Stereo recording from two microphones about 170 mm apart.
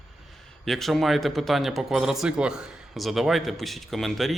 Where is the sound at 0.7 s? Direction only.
Centre (ahead or behind).